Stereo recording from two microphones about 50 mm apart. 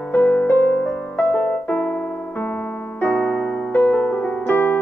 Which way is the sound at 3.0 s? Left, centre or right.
Left.